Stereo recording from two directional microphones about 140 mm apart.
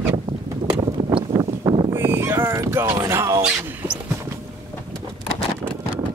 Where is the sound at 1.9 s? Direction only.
20° right (ahead or behind).